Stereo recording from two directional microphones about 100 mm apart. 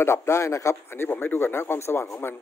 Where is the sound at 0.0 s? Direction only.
25° left (ahead or behind).